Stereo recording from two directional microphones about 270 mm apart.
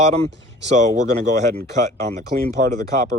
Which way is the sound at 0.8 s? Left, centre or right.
Right.